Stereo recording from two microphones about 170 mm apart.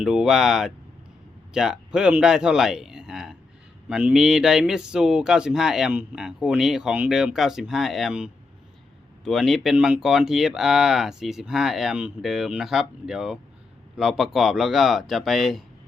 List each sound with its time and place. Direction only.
0.0 s speech: 5° right (ahead or behind)